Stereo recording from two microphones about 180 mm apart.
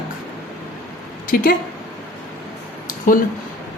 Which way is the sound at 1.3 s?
50° left (ahead or behind).